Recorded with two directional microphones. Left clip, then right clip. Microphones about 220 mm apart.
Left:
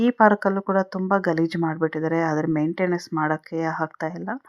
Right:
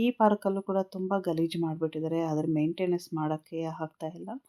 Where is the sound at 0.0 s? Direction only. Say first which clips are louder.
Left 8 dB; 20° left (ahead or behind).